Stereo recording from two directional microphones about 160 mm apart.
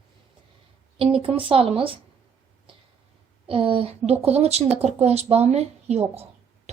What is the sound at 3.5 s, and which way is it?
A woman's voice, 35° right (ahead or behind).